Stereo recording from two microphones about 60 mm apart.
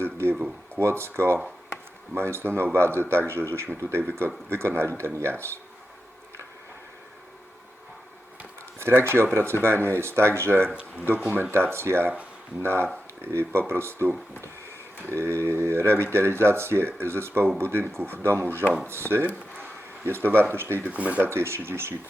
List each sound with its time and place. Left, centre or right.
0.0 s a sound: right
0.8 s speech: right
8.8 s speech: right
20.8 s speech: right
21.3 s speech: right